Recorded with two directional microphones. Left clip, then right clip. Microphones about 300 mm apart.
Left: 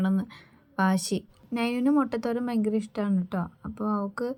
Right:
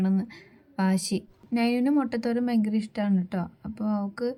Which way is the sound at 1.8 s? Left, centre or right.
Left.